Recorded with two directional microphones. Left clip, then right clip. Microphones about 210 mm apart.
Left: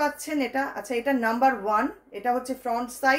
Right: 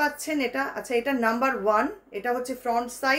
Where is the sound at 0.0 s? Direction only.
15° right (ahead or behind).